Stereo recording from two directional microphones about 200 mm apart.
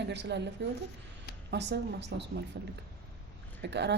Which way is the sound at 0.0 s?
60° right (ahead or behind).